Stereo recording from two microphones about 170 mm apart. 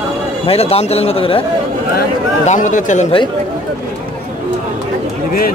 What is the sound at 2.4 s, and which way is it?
Speech, 45° left (ahead or behind).